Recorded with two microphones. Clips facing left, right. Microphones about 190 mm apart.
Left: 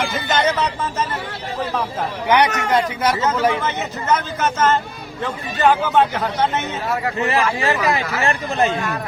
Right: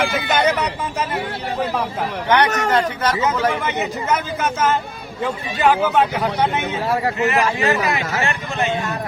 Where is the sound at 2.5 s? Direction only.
40° right (ahead or behind).